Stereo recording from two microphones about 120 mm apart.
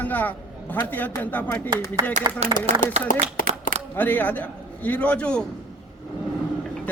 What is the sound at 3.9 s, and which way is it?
A man's voice, 15° left (ahead or behind).